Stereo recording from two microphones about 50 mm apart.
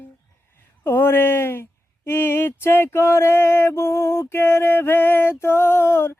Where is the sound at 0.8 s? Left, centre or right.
Left.